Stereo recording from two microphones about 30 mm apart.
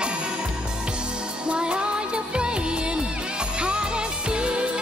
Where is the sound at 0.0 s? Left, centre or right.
Right.